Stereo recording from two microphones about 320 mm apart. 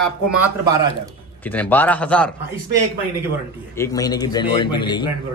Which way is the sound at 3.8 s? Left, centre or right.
Centre.